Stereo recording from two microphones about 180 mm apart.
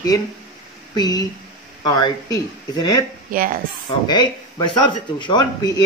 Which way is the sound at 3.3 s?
50° right (ahead or behind).